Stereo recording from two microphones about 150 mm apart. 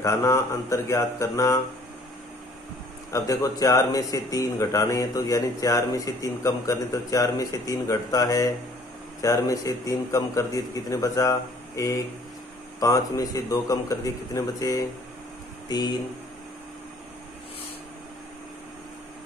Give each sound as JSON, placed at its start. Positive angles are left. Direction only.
{"t": 0.0, "sound": "speech", "side_deg": 20}
{"t": 3.1, "sound": "speech", "side_deg": 20}